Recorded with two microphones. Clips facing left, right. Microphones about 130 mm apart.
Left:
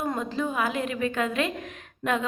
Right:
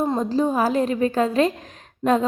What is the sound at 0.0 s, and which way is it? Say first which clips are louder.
A woman's voice: right 7 dB; 30° right (ahead or behind).